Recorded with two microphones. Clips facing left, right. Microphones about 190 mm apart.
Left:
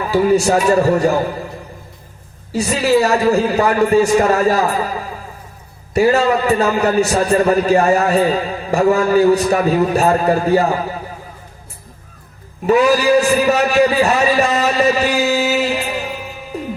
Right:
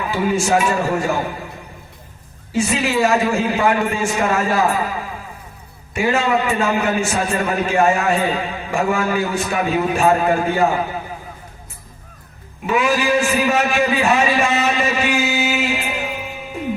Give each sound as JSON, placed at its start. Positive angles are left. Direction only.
{"t": 0.0, "sound": "a man's voice", "side_deg": 40}
{"t": 2.5, "sound": "a man's voice", "side_deg": 40}
{"t": 12.6, "sound": "a man's voice", "side_deg": 40}